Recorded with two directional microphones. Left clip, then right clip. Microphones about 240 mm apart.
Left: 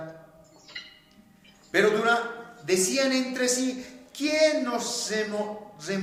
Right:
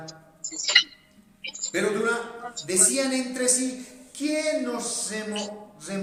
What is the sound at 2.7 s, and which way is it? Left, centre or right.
Speech, centre.